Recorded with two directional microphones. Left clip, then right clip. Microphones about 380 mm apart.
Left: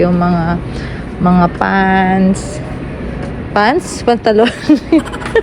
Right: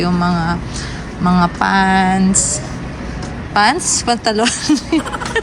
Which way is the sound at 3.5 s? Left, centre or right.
Centre.